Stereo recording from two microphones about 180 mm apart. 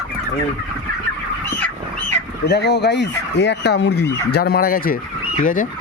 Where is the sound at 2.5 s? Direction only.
65° left (ahead or behind); by 5.6 s 45° left (ahead or behind).